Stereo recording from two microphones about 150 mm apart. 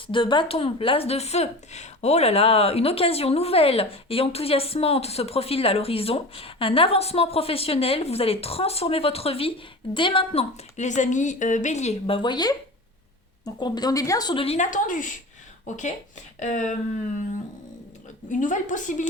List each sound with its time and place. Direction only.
0.1 s speech: 35° left (ahead or behind)
10.8 s a woman's voice: 55° left (ahead or behind); by 14.4 s 25° left (ahead or behind)
14.4 s a woman's voice: 45° left (ahead or behind)
14.7 s a woman's voice: 60° left (ahead or behind)
18.3 s a woman's voice: 55° left (ahead or behind)